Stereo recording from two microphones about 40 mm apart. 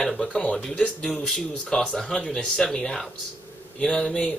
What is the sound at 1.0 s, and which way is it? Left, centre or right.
Speech, centre.